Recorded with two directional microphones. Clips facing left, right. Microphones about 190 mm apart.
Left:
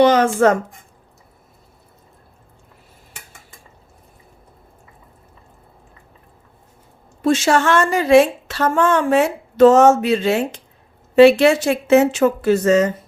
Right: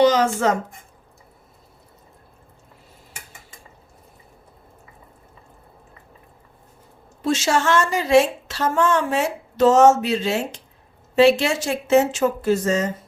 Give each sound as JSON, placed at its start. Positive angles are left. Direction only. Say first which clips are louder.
{"t": 0.0, "sound": "speech", "louder": "left 4 dB", "side_deg": 55}
{"t": 7.2, "sound": "a woman's voice", "louder": "left 5 dB", "side_deg": 55}